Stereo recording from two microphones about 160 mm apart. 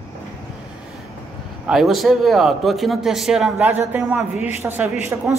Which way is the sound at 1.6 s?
Centre (ahead or behind).